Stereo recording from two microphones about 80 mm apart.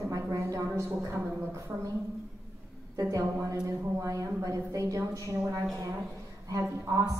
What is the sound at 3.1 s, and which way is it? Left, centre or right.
A woman's voice, right.